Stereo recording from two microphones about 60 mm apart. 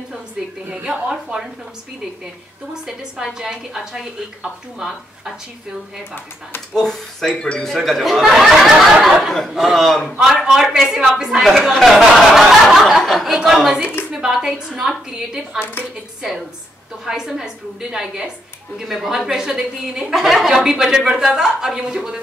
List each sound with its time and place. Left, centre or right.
0.8 s speech: centre
2.7 s speech: centre
6.7 s speech: centre
7.7 s speech: centre
10.2 s speech: centre
11.1 s speech: centre
11.4 s speech: centre
15.6 s a woman's voice: left
17.0 s speech: centre